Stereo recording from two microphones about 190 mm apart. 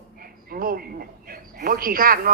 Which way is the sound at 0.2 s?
50° right (ahead or behind).